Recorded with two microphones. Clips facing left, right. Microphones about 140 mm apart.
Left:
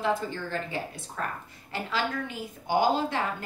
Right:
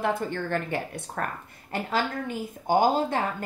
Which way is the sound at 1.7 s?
50° right (ahead or behind).